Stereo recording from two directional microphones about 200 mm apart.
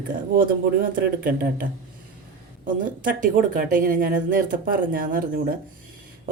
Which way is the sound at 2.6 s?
40° right (ahead or behind).